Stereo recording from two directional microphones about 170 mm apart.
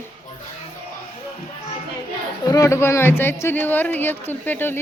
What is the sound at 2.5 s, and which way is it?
A woman's voice, 15° left (ahead or behind).